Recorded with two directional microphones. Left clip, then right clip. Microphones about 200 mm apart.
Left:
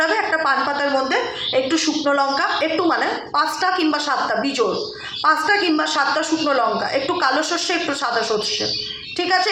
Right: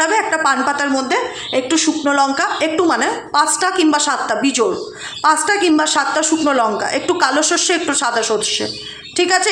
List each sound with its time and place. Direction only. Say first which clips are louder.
0.0 s a woman's voice: right 3 dB; 40° right (ahead or behind)
9.1 s a woman's voice: right 4 dB; 40° right (ahead or behind)